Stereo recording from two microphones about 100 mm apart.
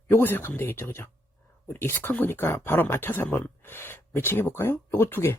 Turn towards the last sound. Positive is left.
turn(degrees=25)  # may be behind; listen again after turning